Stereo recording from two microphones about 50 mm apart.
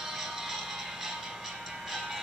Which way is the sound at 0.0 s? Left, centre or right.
Centre.